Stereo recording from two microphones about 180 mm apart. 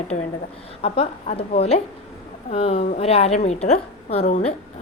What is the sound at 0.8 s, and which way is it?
A woman's voice, 35° left (ahead or behind).